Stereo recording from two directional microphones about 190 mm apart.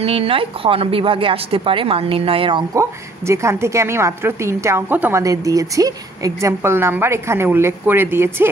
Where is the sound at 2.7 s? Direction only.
15° right (ahead or behind).